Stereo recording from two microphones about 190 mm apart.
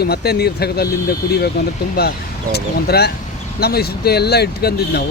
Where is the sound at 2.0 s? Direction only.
55° left (ahead or behind).